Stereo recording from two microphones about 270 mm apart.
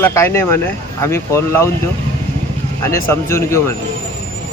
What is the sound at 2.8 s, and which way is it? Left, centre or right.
Speech, centre.